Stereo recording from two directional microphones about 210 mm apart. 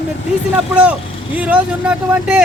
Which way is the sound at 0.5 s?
5° right (ahead or behind).